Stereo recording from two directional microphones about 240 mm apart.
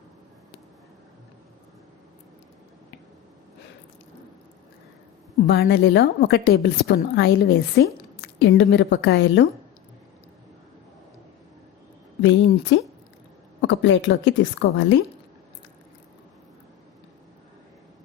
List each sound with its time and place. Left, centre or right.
5.5 s a woman's voice: left
12.2 s a woman's voice: left